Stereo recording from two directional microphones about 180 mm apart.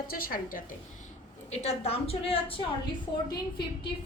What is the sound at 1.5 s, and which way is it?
A woman's voice, 35° left (ahead or behind).